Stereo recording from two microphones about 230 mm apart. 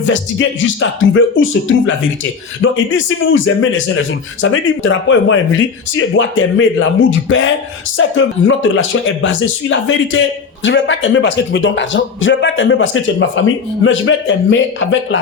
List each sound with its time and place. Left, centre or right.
0.0 s speech: left